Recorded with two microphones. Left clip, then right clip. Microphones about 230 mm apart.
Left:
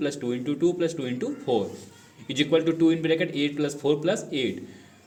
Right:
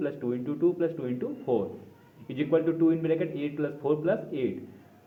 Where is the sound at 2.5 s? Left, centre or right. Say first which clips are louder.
Left 2 dB; left.